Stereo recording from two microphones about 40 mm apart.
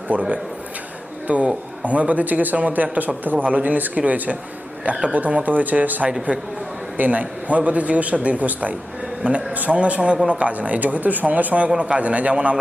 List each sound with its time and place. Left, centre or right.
0.1 s a man's voice: right
11.8 s a man's voice: right